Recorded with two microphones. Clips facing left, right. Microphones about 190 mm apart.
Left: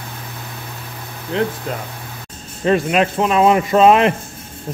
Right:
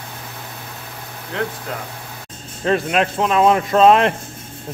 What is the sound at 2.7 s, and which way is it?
Speech, centre (ahead or behind).